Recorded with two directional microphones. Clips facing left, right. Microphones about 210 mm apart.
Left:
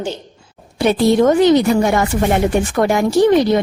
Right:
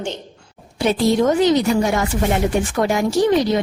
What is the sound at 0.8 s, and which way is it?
A woman's voice, 60° left (ahead or behind).